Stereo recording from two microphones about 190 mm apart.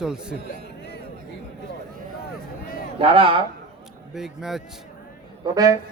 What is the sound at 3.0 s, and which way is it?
Speech, 30° right (ahead or behind).